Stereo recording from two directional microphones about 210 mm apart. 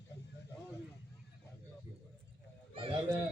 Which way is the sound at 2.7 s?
25° right (ahead or behind).